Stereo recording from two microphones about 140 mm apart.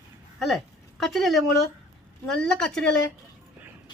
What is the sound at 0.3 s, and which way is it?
Speech, centre (ahead or behind).